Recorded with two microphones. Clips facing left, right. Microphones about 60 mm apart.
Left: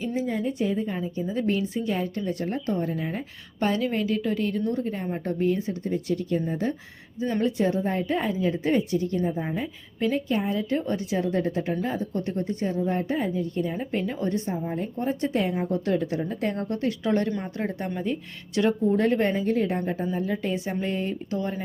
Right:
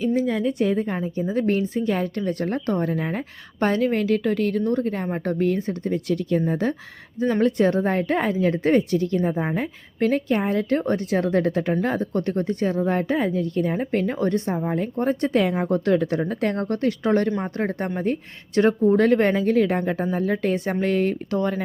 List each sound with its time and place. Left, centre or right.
0.2 s speech: right
0.9 s a woman's voice: right
4.0 s speech: right
5.8 s speech: right
7.2 s speech: right
11.3 s speech: right
13.6 s a woman's voice: right
18.9 s speech: right
20.1 s speech: right
20.8 s speech: right